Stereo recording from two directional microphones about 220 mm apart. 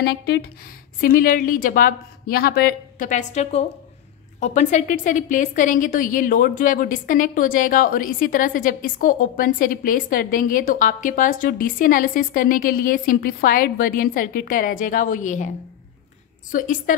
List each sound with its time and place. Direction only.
0.0 s a woman's voice: 45° left (ahead or behind)
16.5 s a woman's voice: 35° left (ahead or behind)